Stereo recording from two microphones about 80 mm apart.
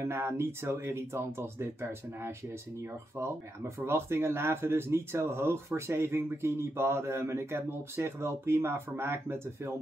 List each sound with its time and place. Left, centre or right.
0.0 s speech: right